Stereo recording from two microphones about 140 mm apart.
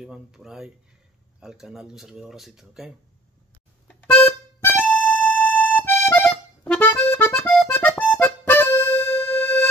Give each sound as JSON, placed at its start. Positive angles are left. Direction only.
{"t": 0.0, "sound": "speech", "side_deg": -5}
{"t": 3.8, "sound": "music", "side_deg": 15}
{"t": 4.8, "sound": "accordion", "side_deg": 10}